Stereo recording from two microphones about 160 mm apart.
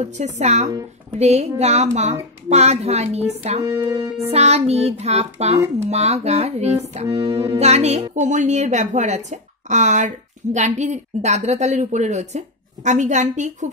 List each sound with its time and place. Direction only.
0.0 s a woman's voice: 45° right (ahead or behind)
1.1 s child singing: 40° right (ahead or behind)
1.6 s a woman's voice: 45° right (ahead or behind)
3.6 s music: 20° right (ahead or behind)
4.3 s child singing: 40° right (ahead or behind)
5.9 s a woman's voice: 40° right (ahead or behind)
7.1 s music: 20° right (ahead or behind)
7.5 s a woman's voice: 40° right (ahead or behind)